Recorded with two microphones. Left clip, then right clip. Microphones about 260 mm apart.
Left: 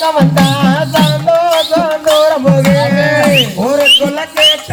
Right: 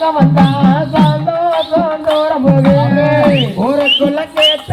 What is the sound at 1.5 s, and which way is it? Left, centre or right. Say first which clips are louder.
Music: left 2 dB; left.